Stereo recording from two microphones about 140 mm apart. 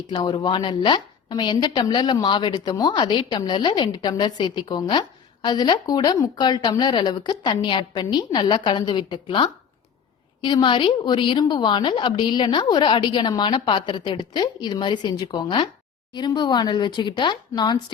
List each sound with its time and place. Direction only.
0.1 s a woman's voice: 30° left (ahead or behind)